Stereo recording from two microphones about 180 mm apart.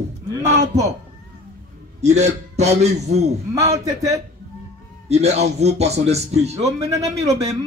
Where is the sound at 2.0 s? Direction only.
40° right (ahead or behind).